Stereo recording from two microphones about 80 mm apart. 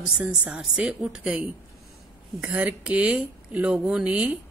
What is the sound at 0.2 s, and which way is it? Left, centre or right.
A woman's voice, centre.